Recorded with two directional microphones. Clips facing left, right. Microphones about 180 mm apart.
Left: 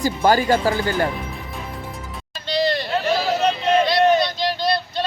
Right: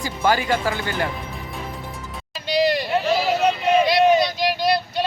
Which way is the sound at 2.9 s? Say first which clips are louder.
Right 1 dB; centre (ahead or behind).